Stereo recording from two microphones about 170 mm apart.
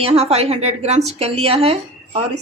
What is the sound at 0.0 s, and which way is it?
A woman's voice, 35° right (ahead or behind).